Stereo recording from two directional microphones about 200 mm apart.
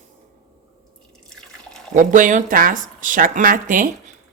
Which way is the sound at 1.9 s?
40° right (ahead or behind).